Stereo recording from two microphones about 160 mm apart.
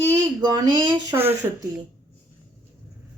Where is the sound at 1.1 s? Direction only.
15° right (ahead or behind).